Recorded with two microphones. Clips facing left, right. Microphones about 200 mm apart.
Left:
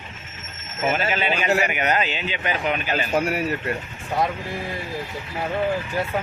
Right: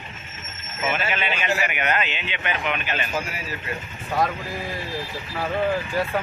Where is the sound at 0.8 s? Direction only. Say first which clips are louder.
Left 3 dB; 40° left (ahead or behind).